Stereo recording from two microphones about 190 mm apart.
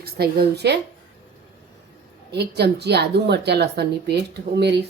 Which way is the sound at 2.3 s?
60° right (ahead or behind).